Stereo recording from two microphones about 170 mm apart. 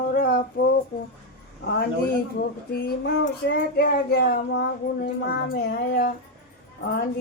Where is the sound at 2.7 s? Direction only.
75° left (ahead or behind).